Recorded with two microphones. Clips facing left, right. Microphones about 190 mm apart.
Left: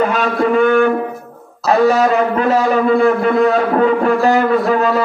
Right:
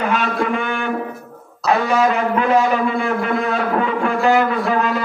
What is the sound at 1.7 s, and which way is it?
Speech, 40° left (ahead or behind).